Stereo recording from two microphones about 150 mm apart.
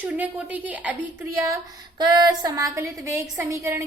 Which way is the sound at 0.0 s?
10° right (ahead or behind).